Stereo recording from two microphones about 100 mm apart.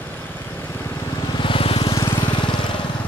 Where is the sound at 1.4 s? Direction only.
60° left (ahead or behind).